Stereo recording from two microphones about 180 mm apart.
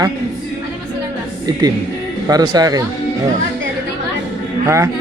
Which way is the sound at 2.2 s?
20° right (ahead or behind).